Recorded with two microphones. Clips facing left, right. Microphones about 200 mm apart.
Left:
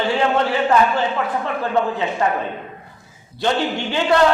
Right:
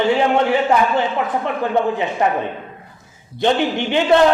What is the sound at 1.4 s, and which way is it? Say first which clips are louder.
Speech: right 3 dB; 20° right (ahead or behind).